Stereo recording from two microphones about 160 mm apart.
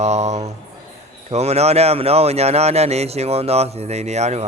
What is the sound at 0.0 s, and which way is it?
Speech, 45° right (ahead or behind).